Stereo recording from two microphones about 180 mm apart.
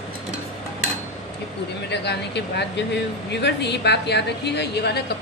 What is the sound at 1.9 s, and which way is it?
A woman's voice, 70° left (ahead or behind).